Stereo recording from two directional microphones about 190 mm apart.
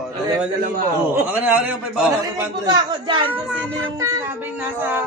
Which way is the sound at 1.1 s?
10° right (ahead or behind).